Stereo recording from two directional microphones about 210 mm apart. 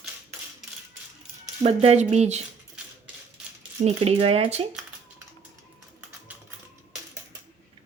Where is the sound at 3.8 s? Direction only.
30° right (ahead or behind).